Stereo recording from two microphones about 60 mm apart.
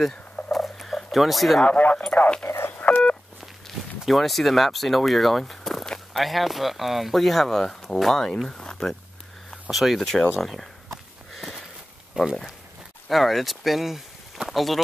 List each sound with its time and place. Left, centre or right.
0.5 s a sound: centre
1.7 s speech: left
2.4 s speech: left
4.0 s speech: centre
9.7 s speech: centre
10.3 s a sound: centre
12.2 s speech: centre
13.1 s speech: centre